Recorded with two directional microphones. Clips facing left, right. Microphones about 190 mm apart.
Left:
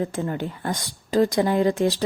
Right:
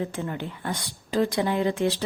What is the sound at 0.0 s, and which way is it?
A woman's voice, 40° left (ahead or behind).